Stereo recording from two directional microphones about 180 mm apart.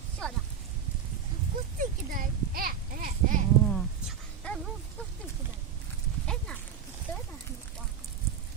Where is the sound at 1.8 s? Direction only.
55° right (ahead or behind).